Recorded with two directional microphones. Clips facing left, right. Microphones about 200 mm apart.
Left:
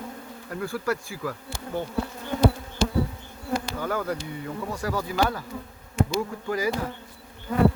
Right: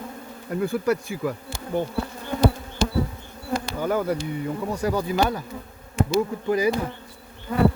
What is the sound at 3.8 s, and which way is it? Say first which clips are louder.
Speech: right 5 dB; 20° right (ahead or behind).